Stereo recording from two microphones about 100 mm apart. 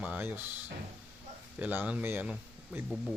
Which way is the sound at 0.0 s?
15° right (ahead or behind).